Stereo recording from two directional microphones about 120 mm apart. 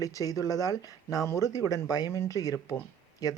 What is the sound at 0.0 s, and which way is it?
Speech, 30° left (ahead or behind).